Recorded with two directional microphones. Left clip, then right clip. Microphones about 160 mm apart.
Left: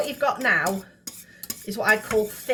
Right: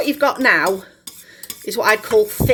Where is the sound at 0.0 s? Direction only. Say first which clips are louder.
Right 7 dB; 65° right (ahead or behind).